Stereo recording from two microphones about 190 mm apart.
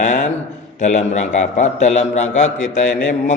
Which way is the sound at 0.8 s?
40° left (ahead or behind).